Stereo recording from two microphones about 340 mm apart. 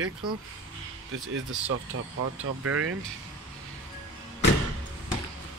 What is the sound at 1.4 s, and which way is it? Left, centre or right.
Speech, right.